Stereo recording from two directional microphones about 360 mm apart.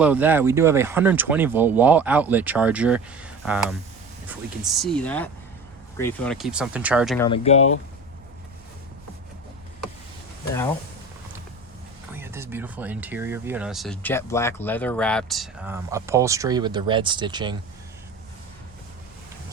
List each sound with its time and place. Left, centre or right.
0.0 s speech: centre
7.3 s speech: centre
12.1 s speech: centre